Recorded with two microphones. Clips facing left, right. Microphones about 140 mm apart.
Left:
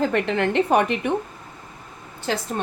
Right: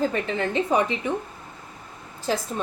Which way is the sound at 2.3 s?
70° left (ahead or behind).